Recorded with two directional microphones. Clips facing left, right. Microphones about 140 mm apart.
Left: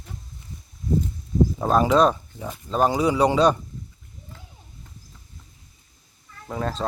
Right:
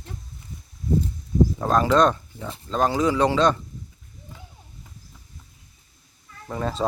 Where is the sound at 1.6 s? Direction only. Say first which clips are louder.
Left 1 dB; 10° left (ahead or behind).